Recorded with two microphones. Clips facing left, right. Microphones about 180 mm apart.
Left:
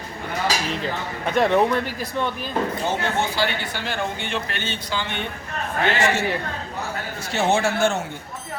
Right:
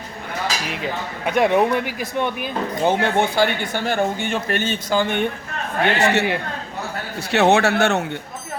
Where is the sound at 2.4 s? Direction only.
55° right (ahead or behind).